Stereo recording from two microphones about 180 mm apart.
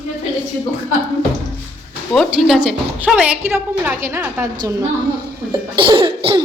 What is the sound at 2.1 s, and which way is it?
A woman's voice, centre (ahead or behind).